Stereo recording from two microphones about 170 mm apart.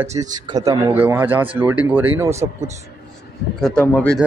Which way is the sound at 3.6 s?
5° left (ahead or behind).